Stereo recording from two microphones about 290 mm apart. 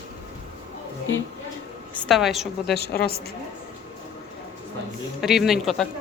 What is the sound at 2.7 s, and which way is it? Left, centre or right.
Speech, left.